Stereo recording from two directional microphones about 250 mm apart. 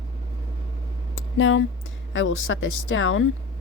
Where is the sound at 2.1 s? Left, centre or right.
Left.